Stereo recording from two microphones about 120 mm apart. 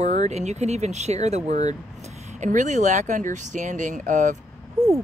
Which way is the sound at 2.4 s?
90° right.